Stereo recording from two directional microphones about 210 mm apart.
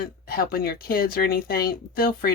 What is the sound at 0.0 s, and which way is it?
Speech, 45° left (ahead or behind).